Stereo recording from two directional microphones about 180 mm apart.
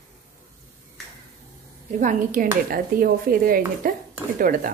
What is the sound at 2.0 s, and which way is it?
Speech, 45° right (ahead or behind).